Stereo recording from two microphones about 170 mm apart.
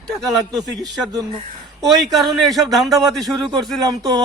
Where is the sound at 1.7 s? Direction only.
Centre (ahead or behind).